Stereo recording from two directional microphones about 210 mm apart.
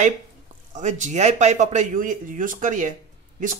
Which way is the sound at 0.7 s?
35° right (ahead or behind).